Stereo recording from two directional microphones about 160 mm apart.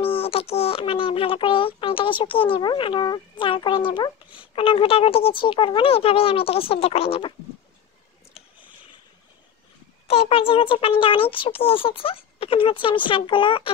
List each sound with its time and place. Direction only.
0.0 s a child's voice: 35° left (ahead or behind)
10.0 s speech: 40° left (ahead or behind)